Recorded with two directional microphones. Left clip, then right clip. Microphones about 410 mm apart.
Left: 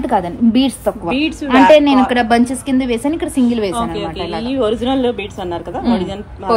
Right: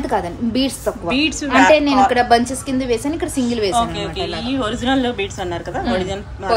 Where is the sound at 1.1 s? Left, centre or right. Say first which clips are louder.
Left 1 dB; centre.